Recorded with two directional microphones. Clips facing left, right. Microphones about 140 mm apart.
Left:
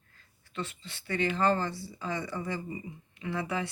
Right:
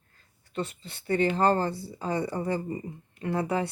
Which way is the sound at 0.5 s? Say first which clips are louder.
Right 5 dB; 35° right (ahead or behind).